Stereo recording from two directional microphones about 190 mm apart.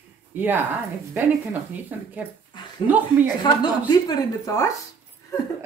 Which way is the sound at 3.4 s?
20° left (ahead or behind).